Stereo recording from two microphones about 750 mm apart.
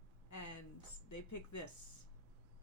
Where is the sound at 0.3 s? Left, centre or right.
Left.